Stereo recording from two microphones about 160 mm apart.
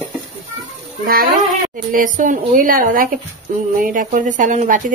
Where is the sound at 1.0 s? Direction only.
65° right (ahead or behind).